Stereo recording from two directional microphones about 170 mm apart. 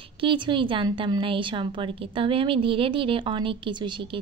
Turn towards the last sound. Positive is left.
turn(degrees=-25)  # may be behind; listen again after turning